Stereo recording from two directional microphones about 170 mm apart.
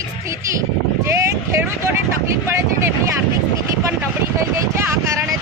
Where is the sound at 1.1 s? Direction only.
15° right (ahead or behind).